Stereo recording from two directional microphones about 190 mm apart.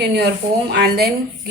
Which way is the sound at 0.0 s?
60° right (ahead or behind).